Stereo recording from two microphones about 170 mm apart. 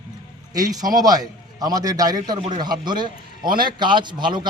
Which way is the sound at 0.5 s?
20° right (ahead or behind).